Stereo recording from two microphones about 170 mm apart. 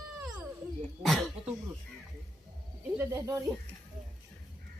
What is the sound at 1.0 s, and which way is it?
Throat clearing, centre (ahead or behind).